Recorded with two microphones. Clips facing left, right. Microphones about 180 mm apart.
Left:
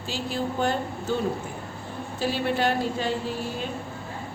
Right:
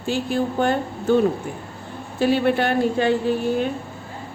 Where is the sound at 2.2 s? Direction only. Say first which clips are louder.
Right 7 dB; 60° right (ahead or behind).